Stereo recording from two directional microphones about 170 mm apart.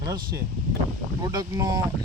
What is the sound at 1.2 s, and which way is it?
Speech, 25° right (ahead or behind).